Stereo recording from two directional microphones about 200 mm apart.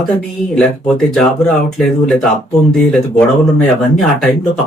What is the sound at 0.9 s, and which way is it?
Speech, centre (ahead or behind).